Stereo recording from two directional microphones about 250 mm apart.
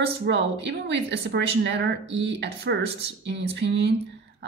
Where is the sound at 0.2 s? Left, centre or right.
Right.